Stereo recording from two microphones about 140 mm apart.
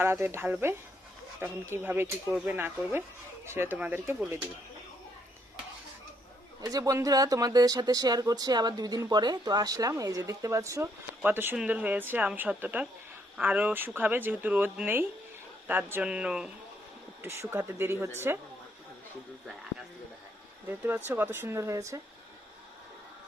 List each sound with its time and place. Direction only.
0.0 s speech: 15° right (ahead or behind)
6.6 s speech: 25° right (ahead or behind); by 16.5 s 5° right (ahead or behind)
17.2 s speech: 15° right (ahead or behind)
20.7 s speech: 15° right (ahead or behind)